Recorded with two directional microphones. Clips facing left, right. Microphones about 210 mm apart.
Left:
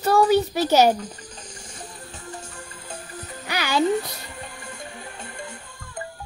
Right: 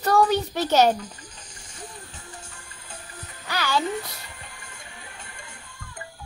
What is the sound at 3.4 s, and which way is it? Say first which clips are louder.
Music: left 1 dB; 15° left (ahead or behind).